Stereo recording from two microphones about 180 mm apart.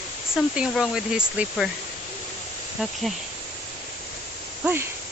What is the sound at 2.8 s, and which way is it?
Speech, 5° right (ahead or behind).